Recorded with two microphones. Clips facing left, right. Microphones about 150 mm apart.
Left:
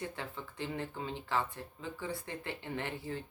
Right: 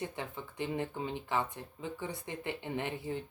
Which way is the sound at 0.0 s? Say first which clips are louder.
Right 2 dB; 20° right (ahead or behind).